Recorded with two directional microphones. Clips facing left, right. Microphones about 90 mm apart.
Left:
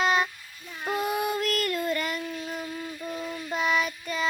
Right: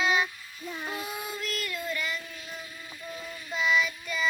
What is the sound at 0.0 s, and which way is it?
Child singing, 50° left (ahead or behind).